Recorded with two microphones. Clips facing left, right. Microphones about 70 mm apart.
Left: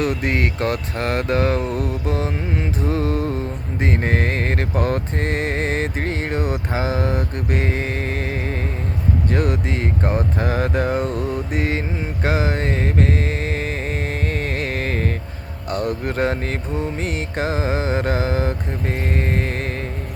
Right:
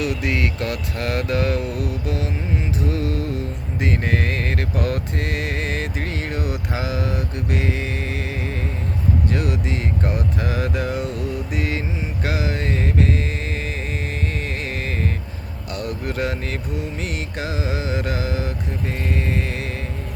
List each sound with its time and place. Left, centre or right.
0.0 s music: left
9.3 s speech: left
10.0 s mantra: left
15.7 s music: left